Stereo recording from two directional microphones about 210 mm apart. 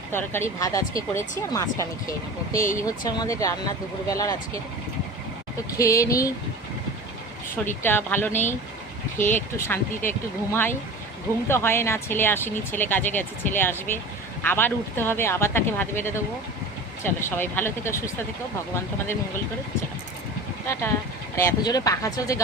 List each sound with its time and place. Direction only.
0.1 s speech: 10° left (ahead or behind)
5.7 s speech: 15° left (ahead or behind)
7.8 s speech: 10° left (ahead or behind)
21.3 s speech: 15° left (ahead or behind)